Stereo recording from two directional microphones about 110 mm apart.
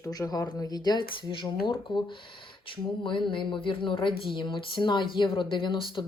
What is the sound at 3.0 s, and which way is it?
Speech, 50° left (ahead or behind).